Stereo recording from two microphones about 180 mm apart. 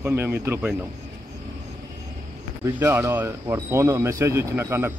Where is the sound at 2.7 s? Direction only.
15° right (ahead or behind).